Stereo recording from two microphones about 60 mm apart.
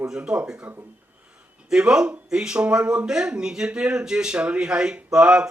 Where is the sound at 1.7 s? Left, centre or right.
Centre.